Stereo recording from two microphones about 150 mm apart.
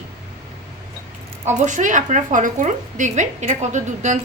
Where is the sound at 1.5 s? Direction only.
50° right (ahead or behind).